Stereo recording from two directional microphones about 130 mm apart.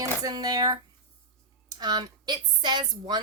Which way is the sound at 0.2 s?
30° right (ahead or behind).